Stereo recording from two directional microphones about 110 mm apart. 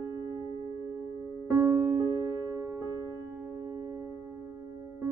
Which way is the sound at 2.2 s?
30° right (ahead or behind).